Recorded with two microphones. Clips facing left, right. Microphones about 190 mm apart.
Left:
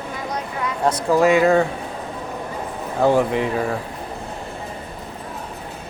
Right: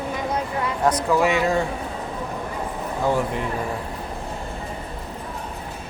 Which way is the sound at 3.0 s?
70° left (ahead or behind).